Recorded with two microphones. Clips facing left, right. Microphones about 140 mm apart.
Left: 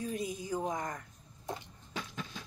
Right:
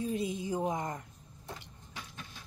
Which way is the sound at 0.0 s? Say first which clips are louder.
Right 3 dB; 25° right (ahead or behind).